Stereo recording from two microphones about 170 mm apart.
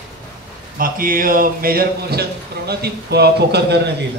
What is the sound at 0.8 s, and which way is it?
A man's voice, 55° right (ahead or behind).